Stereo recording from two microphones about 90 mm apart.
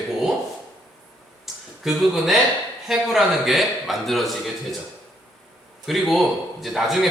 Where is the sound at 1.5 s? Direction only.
Centre (ahead or behind).